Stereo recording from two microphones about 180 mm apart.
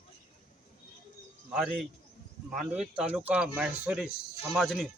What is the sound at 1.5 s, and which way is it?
Speech, 5° right (ahead or behind).